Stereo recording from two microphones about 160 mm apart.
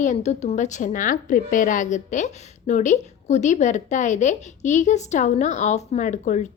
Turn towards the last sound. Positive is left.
turn(degrees=50)  # may be behind; listen again after turning